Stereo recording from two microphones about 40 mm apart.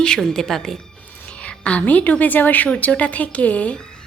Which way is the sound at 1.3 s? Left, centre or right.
Left.